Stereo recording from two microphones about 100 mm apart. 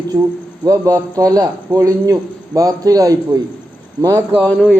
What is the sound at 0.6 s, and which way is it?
A man's voice, 35° right (ahead or behind).